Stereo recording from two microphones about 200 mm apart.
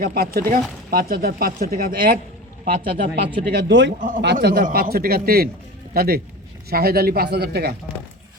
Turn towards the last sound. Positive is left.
turn(degrees=-55)  # may be behind; listen again after turning